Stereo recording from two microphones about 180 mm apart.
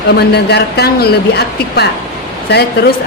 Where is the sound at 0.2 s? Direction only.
65° left (ahead or behind).